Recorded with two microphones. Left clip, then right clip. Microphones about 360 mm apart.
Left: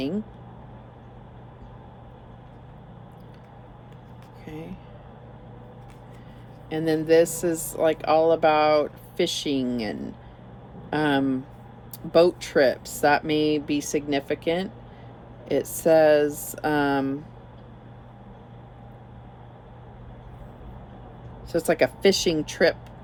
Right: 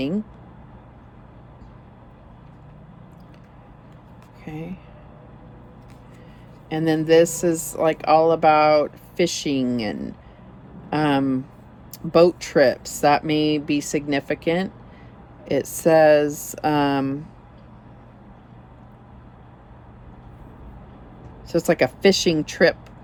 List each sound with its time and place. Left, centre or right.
4.4 s speech: right
6.7 s speech: right
21.5 s speech: right